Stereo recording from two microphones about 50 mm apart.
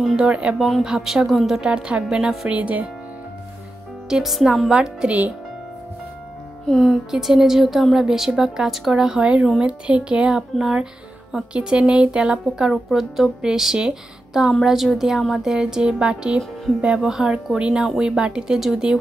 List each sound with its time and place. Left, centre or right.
0.0 s a woman's voice: centre
0.6 s a woman's voice: centre
1.6 s a woman's voice: centre
2.5 s a woman's voice: right
4.1 s speech: centre
4.6 s a woman's voice: centre
6.7 s speech: centre
7.1 s a woman's voice: centre
12.9 s a woman's voice: centre
15.5 s a woman's voice: centre